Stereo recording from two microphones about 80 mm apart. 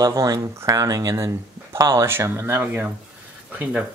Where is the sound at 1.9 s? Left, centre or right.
Right.